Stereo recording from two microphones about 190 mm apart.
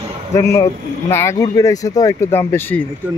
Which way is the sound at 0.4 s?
15° left (ahead or behind).